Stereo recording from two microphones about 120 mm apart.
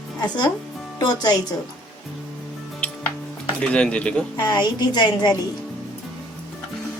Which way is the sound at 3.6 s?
10° left (ahead or behind).